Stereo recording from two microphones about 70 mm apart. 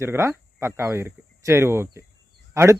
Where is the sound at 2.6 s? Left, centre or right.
Right.